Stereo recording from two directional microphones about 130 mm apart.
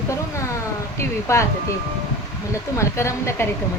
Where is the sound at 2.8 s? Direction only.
20° left (ahead or behind).